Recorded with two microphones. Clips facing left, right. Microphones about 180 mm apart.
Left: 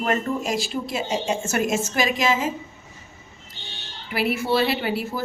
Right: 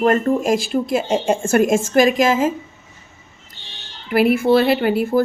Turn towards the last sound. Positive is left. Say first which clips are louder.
# right 10 dB
turn(degrees=-50)  # may be behind; listen again after turning